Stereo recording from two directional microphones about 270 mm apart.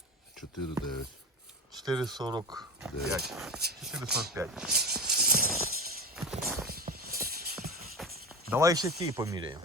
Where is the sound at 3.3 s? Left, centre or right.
Centre.